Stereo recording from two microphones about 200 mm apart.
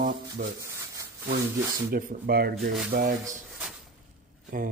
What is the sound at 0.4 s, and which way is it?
Speech, 45° right (ahead or behind).